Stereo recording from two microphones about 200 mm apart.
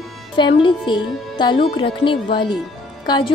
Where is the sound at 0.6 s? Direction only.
25° left (ahead or behind).